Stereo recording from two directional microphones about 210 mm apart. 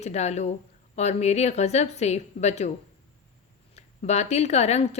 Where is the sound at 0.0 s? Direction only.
30° left (ahead or behind).